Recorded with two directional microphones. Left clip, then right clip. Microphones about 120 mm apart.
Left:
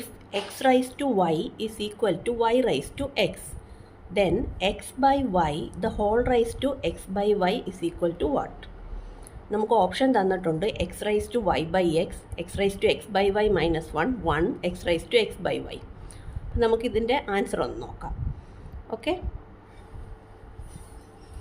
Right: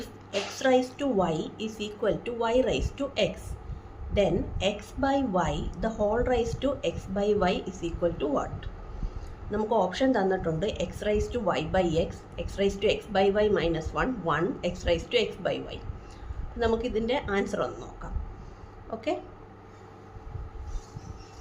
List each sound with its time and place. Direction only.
0.0 s a woman's voice: 50° left (ahead or behind)
9.5 s a woman's voice: 50° left (ahead or behind)